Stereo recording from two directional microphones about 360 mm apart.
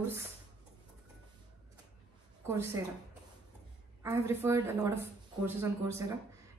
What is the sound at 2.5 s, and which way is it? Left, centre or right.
Speech, centre.